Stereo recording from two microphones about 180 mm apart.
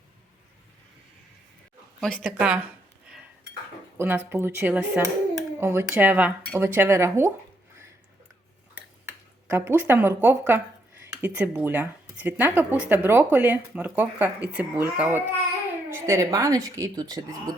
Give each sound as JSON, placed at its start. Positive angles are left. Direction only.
{"t": 2.0, "sound": "speech", "side_deg": 5}
{"t": 2.2, "sound": "speech", "side_deg": -5}
{"t": 3.9, "sound": "speech", "side_deg": -10}
{"t": 9.0, "sound": "speech", "side_deg": -10}